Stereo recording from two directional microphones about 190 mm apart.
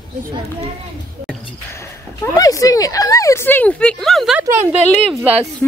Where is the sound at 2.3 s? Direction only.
20° left (ahead or behind); by 4.4 s centre (ahead or behind).